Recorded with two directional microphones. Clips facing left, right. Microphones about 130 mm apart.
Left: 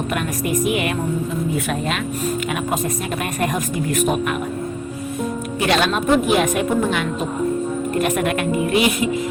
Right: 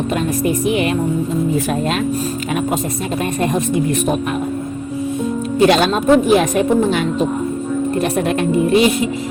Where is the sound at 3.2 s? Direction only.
30° right (ahead or behind).